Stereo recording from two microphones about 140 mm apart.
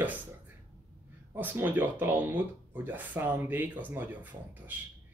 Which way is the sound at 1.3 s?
15° right (ahead or behind).